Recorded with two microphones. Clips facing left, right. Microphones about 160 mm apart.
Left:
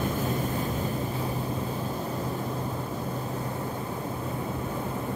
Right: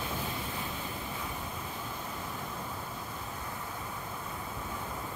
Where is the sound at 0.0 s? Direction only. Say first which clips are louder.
Left 9 dB; 45° left (ahead or behind).